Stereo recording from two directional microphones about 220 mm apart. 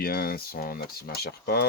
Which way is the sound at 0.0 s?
40° left (ahead or behind).